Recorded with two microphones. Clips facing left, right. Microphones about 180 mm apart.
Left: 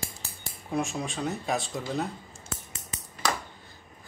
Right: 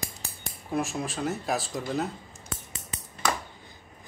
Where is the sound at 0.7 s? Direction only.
Centre (ahead or behind).